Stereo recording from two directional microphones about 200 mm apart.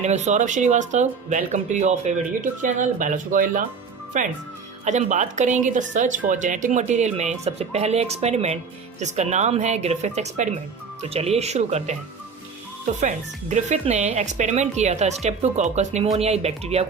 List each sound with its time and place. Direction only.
0.0 s speech: 35° right (ahead or behind)
13.0 s speech: 35° right (ahead or behind)